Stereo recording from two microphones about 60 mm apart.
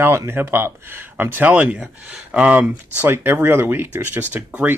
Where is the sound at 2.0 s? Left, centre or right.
Centre.